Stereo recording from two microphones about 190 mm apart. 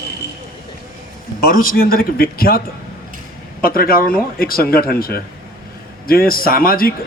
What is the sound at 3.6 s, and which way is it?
A man's voice, 50° left (ahead or behind).